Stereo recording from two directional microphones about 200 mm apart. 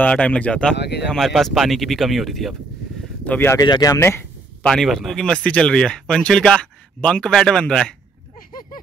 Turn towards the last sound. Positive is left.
turn(degrees=5)  # may be behind; listen again after turning